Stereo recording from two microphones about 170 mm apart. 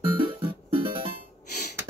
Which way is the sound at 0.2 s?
30° right (ahead or behind).